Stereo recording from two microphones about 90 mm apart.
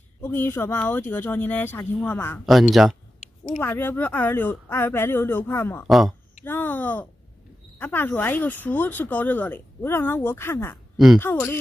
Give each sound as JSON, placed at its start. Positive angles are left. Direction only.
{"t": 0.2, "sound": "speech", "side_deg": 25}
{"t": 2.4, "sound": "speech", "side_deg": 0}
{"t": 3.6, "sound": "speech", "side_deg": 25}
{"t": 5.9, "sound": "speech", "side_deg": 0}
{"t": 6.4, "sound": "speech", "side_deg": 20}